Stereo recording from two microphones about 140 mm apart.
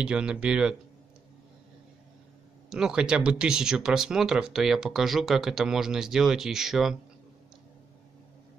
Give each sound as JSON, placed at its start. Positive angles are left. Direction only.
{"t": 0.0, "sound": "speech", "side_deg": -5}
{"t": 2.7, "sound": "speech", "side_deg": -5}